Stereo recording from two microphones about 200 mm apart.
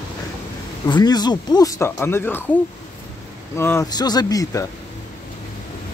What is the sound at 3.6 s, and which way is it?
Speech, 10° left (ahead or behind).